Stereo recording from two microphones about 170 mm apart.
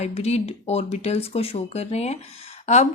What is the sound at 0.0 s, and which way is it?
A woman's voice, 40° left (ahead or behind).